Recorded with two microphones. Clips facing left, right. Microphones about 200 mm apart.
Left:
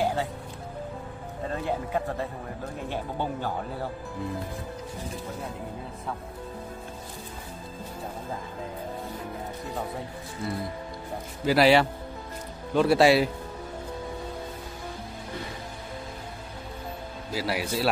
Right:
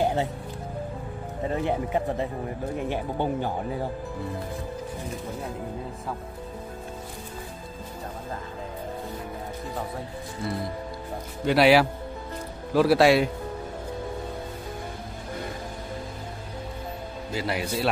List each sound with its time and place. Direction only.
0.0 s music: 25° right (ahead or behind)
1.5 s speech: 20° right (ahead or behind)
11.4 s a man's voice: centre (ahead or behind)
17.3 s a man's voice: 5° left (ahead or behind)